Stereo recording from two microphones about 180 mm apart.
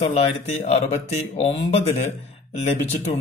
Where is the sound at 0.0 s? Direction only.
40° left (ahead or behind).